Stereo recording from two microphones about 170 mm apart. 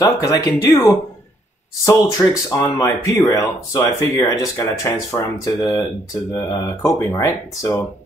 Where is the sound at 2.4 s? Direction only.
20° left (ahead or behind).